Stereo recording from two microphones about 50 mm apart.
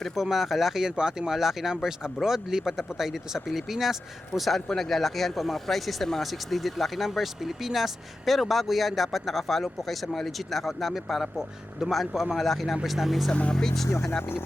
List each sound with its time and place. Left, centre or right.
0.2 s speech: centre
13.5 s speech: centre
13.8 s speech: left